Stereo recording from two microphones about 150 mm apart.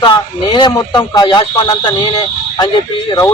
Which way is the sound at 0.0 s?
30° left (ahead or behind).